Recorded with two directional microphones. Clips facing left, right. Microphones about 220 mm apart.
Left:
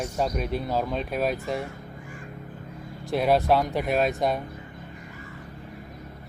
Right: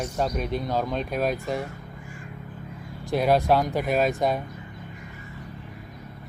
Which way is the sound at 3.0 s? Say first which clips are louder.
Right 1 dB; centre (ahead or behind).